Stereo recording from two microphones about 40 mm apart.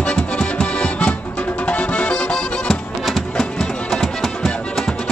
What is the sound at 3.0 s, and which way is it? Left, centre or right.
Music, centre.